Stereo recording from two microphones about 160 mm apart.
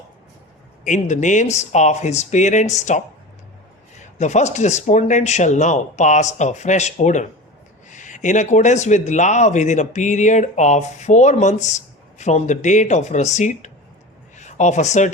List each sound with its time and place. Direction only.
0.9 s speech: 50° left (ahead or behind)
4.2 s speech: 45° left (ahead or behind)